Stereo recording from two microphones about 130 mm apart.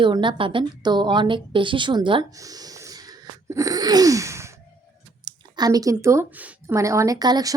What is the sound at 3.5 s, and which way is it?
Sneeze, 25° right (ahead or behind).